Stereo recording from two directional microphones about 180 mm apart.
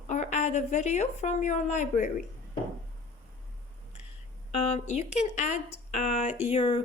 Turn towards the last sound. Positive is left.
turn(degrees=30)  # may be behind; listen again after turning